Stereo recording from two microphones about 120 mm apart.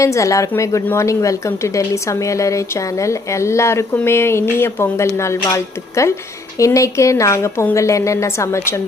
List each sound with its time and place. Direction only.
0.0 s a woman's voice: 25° left (ahead or behind)